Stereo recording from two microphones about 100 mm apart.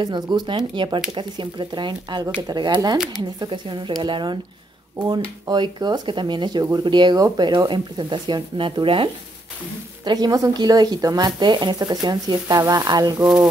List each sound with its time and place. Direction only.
0.0 s speech: 45° right (ahead or behind)
5.5 s speech: 45° right (ahead or behind)
10.0 s speech: 40° right (ahead or behind)